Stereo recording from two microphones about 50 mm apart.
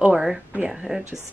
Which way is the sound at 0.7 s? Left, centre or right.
Centre.